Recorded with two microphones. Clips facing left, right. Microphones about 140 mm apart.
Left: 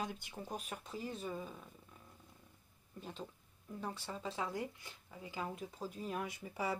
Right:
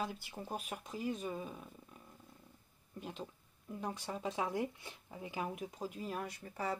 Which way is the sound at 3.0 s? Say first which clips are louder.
Right 2 dB; 10° right (ahead or behind).